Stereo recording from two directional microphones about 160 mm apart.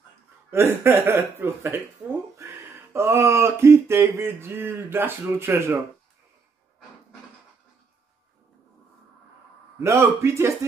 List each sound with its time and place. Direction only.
0.5 s speech: 15° right (ahead or behind)
9.8 s speech: 20° right (ahead or behind)